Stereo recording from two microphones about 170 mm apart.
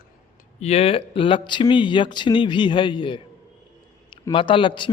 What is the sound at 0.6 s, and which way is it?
Speech, 40° left (ahead or behind).